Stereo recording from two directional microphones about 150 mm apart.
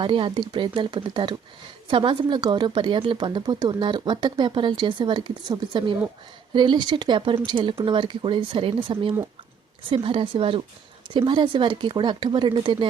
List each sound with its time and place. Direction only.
0.0 s a woman's voice: 35° right (ahead or behind)